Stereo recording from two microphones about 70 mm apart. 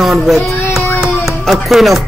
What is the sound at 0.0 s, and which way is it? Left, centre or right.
Child singing, centre.